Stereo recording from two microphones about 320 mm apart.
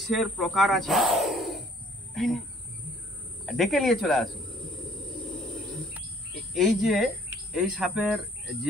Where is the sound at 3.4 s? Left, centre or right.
Centre.